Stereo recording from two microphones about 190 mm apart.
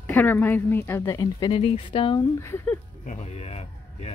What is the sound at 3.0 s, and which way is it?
A man's voice, 35° left (ahead or behind).